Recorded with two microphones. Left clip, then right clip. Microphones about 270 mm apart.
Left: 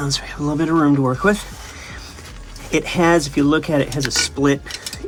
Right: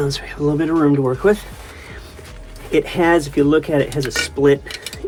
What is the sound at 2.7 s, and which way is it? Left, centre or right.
Speech, left.